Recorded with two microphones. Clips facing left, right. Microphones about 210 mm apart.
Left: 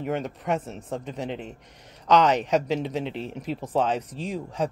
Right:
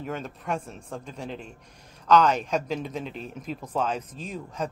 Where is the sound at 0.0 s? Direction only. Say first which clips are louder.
Left 5 dB; 15° left (ahead or behind).